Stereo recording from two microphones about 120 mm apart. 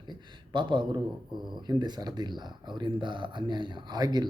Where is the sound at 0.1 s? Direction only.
40° right (ahead or behind).